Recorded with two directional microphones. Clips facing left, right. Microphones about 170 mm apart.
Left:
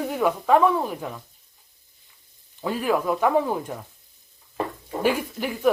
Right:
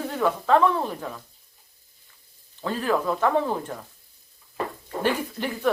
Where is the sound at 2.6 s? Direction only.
15° left (ahead or behind).